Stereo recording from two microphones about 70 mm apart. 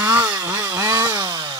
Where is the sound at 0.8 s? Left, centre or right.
Right.